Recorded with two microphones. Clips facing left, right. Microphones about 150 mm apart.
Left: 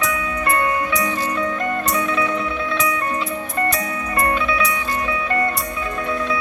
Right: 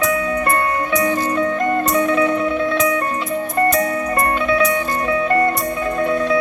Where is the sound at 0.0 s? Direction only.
45° right (ahead or behind).